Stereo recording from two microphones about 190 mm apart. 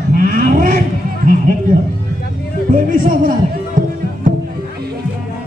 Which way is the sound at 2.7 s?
45° right (ahead or behind).